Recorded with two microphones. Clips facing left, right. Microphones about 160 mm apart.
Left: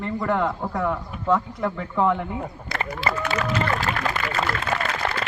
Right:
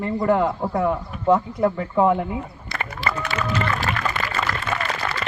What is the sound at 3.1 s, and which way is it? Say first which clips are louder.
Speech: even; 35° left (ahead or behind).